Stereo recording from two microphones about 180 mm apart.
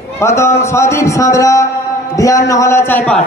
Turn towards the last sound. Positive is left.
turn(degrees=10)  # may be behind; listen again after turning